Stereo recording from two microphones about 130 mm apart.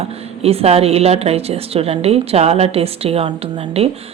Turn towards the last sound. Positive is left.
turn(degrees=-50)  # may be behind; listen again after turning